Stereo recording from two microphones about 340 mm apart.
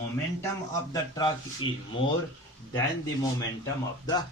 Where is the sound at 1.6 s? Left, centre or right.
Left.